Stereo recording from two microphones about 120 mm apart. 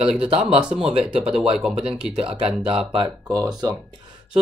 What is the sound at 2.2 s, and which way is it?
Speech, 50° right (ahead or behind).